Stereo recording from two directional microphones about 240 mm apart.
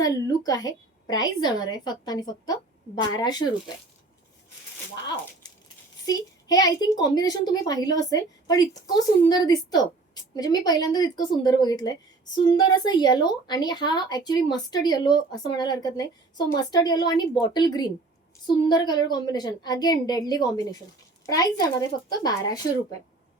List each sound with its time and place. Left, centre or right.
0.0 s speech: centre
6.1 s speech: centre